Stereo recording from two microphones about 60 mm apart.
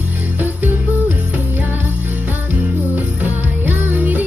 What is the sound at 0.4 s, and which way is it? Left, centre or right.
Music, right.